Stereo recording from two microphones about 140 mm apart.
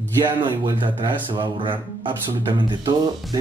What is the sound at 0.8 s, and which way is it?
Speech, 35° right (ahead or behind).